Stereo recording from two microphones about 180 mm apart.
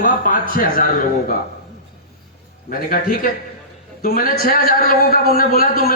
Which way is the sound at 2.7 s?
50° left (ahead or behind).